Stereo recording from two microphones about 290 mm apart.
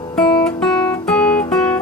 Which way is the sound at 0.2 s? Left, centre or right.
Centre.